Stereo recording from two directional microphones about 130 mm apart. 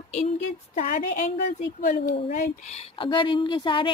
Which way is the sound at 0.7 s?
70° left (ahead or behind).